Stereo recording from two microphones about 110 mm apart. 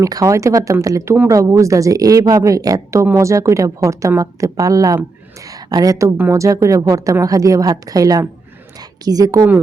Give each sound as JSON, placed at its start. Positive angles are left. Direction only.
{"t": 0.0, "sound": "a woman's voice", "side_deg": -30}